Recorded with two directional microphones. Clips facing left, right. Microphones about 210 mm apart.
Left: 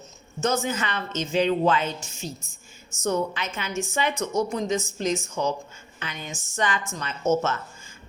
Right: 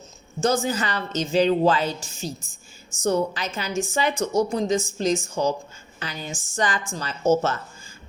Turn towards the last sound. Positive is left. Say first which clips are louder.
# right 3 dB
turn(degrees=-35)  # may be behind; listen again after turning